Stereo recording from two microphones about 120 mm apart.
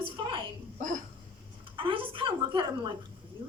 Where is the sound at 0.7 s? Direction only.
90° right.